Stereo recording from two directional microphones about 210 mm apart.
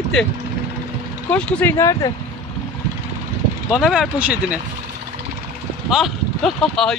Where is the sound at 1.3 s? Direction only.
5° left (ahead or behind).